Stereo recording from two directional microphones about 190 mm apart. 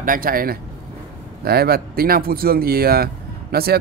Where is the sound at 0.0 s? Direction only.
45° right (ahead or behind).